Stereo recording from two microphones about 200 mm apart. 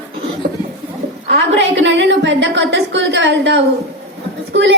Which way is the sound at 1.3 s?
65° right (ahead or behind).